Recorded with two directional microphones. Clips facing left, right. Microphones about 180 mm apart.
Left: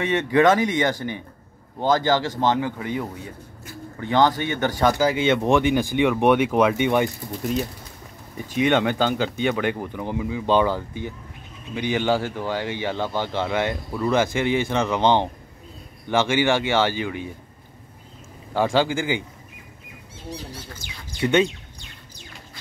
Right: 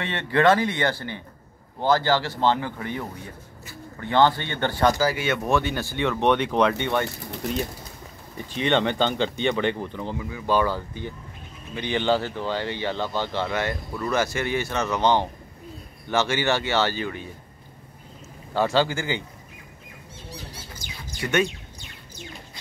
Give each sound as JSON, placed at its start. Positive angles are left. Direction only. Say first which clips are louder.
{"t": 0.0, "sound": "speech", "louder": "left 3 dB", "side_deg": 15}
{"t": 8.5, "sound": "speech", "louder": "left 2 dB", "side_deg": 5}
{"t": 18.5, "sound": "speech", "louder": "left 1 dB", "side_deg": 15}